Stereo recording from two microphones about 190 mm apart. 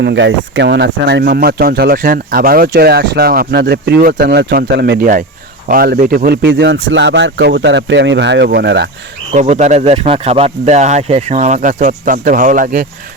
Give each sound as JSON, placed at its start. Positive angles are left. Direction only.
{"t": 0.0, "sound": "speech", "side_deg": -70}
{"t": 9.3, "sound": "speech", "side_deg": -40}